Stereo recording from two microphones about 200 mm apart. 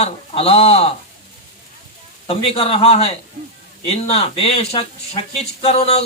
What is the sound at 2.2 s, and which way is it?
Speech, 30° left (ahead or behind).